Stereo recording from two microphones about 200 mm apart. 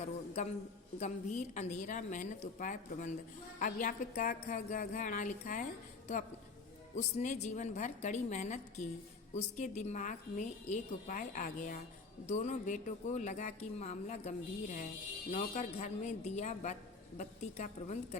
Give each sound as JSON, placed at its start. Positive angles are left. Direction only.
{"t": 0.9, "sound": "a woman's voice", "side_deg": 35}
{"t": 6.9, "sound": "a woman's voice", "side_deg": 35}